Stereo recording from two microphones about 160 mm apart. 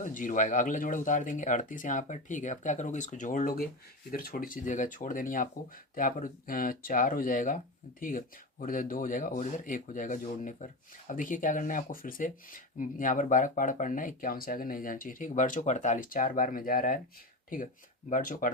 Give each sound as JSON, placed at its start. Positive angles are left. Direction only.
{"t": 0.0, "sound": "speech", "side_deg": 55}
{"t": 18.1, "sound": "speech", "side_deg": 60}